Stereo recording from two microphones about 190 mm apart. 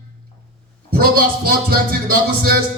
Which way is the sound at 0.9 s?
50° right (ahead or behind).